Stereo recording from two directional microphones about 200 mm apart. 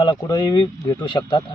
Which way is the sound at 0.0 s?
20° left (ahead or behind).